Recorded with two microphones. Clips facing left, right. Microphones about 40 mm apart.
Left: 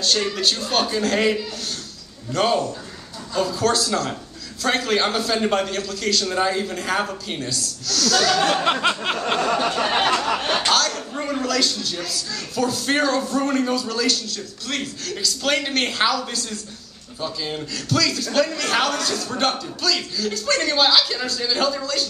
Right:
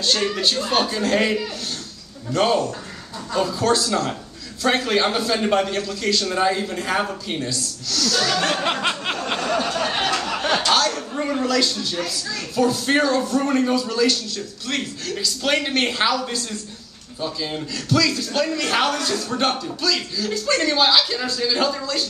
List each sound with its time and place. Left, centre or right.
0.0 s a man's voice: centre
9.4 s a sound: centre
10.7 s a man's voice: centre